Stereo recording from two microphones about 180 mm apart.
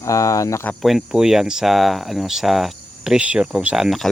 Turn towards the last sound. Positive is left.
turn(degrees=0)  # may be behind; listen again after turning